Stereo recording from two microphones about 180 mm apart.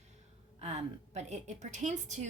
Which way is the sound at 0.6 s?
35° right (ahead or behind).